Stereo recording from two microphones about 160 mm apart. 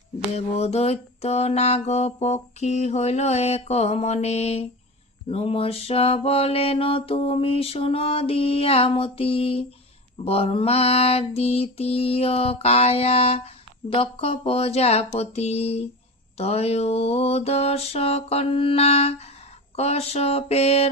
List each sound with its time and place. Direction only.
0.3 s mantra: 40° left (ahead or behind)